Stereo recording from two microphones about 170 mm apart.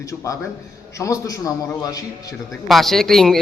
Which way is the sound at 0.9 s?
20° left (ahead or behind).